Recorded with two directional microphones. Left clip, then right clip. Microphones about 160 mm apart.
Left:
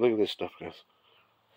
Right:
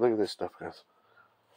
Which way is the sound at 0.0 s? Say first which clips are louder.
Left 1 dB; 45° left (ahead or behind).